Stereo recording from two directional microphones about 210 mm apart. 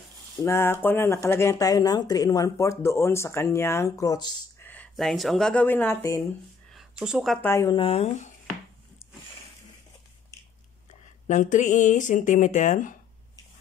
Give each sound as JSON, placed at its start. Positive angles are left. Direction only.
{"t": 0.4, "sound": "speech", "side_deg": 10}
{"t": 4.6, "sound": "speech", "side_deg": 5}
{"t": 6.7, "sound": "a sound", "side_deg": 0}
{"t": 7.4, "sound": "speech", "side_deg": 15}
{"t": 7.7, "sound": "speech", "side_deg": 25}
{"t": 10.3, "sound": "biting", "side_deg": 15}
{"t": 10.9, "sound": "speech", "side_deg": 35}